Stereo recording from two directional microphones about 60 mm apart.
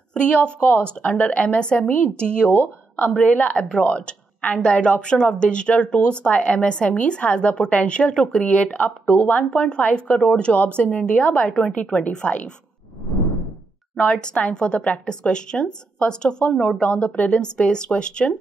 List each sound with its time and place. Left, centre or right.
0.1 s speech: centre
0.6 s speech: left
13.9 s speech: centre